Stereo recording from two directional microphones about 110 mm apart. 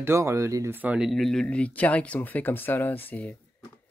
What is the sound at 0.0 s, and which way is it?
Speech, 25° right (ahead or behind).